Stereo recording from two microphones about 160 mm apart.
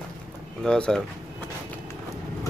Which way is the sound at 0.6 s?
5° left (ahead or behind).